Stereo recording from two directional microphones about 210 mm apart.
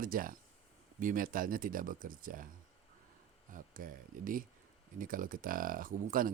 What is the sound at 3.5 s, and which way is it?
Speech, 40° right (ahead or behind).